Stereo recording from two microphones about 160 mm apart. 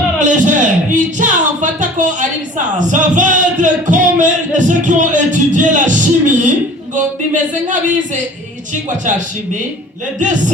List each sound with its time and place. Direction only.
0.2 s a man's voice: 50° right (ahead or behind)